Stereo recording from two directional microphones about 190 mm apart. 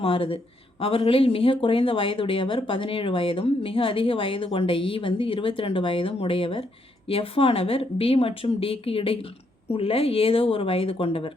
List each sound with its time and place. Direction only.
0.0 s speech: 30° left (ahead or behind)